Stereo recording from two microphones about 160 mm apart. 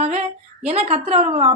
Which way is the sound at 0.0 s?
45° right (ahead or behind).